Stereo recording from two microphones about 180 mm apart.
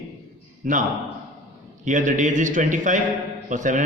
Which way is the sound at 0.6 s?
45° right (ahead or behind).